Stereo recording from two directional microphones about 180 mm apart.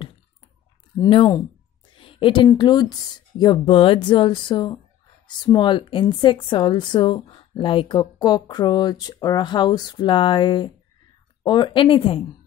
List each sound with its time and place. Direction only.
0.9 s a woman's voice: 25° left (ahead or behind)